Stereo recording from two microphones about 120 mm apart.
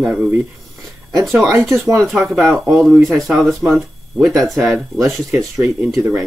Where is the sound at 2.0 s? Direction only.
5° right (ahead or behind).